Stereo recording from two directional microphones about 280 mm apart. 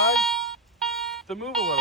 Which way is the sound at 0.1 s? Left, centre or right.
Centre.